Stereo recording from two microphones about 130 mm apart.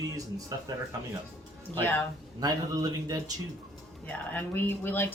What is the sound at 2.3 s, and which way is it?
Speech, 30° right (ahead or behind).